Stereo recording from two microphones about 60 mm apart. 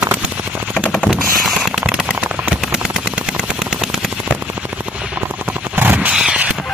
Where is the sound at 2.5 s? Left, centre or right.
Centre.